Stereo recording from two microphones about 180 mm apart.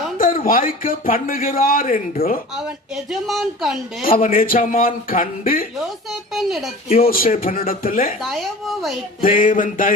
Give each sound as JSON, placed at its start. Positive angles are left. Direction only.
{"t": 0.2, "sound": "a man's voice", "side_deg": 50}
{"t": 2.6, "sound": "speech", "side_deg": 0}
{"t": 4.0, "sound": "a man's voice", "side_deg": 55}
{"t": 6.1, "sound": "speech", "side_deg": 0}
{"t": 6.9, "sound": "a man's voice", "side_deg": 55}
{"t": 8.2, "sound": "speech", "side_deg": 0}
{"t": 9.2, "sound": "a man's voice", "side_deg": 50}